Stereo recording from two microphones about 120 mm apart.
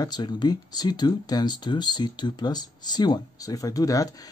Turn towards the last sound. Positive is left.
turn(degrees=30)  # may be behind; listen again after turning